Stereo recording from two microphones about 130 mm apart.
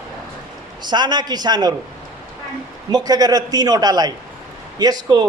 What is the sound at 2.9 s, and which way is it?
A man's voice, 30° right (ahead or behind).